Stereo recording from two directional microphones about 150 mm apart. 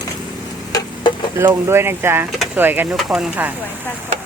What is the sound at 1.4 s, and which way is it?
Speech, 15° right (ahead or behind).